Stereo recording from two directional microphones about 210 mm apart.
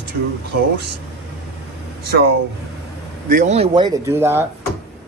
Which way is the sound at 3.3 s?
35° right (ahead or behind).